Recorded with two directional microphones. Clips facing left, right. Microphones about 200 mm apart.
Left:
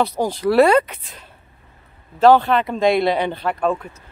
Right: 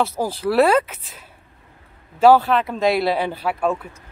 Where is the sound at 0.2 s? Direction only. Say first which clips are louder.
Left 3 dB; centre (ahead or behind).